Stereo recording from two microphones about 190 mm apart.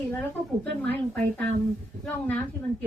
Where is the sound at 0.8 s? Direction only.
10° left (ahead or behind).